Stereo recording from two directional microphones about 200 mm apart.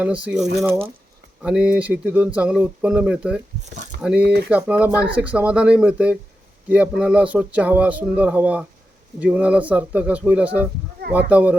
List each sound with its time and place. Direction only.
0.0 s speech: 5° right (ahead or behind)
4.2 s speech: 55° right (ahead or behind)
4.4 s speech: 5° right (ahead or behind)